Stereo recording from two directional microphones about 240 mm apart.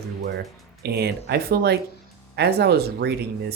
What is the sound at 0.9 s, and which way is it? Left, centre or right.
Speech, right.